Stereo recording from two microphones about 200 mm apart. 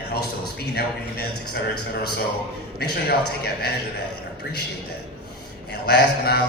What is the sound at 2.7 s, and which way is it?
A man's voice, 50° left (ahead or behind).